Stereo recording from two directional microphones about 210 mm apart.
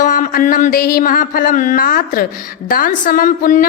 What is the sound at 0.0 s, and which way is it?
A woman's voice, 40° left (ahead or behind).